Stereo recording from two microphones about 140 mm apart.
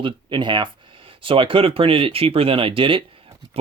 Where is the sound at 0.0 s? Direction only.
35° right (ahead or behind).